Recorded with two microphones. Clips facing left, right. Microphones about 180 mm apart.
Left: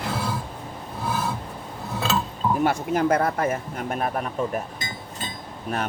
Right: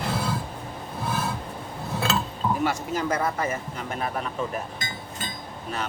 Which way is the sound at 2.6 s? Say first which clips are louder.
Left 4 dB; 55° left (ahead or behind).